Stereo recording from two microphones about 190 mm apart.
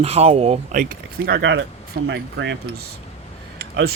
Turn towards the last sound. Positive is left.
turn(degrees=-60)  # may be behind; listen again after turning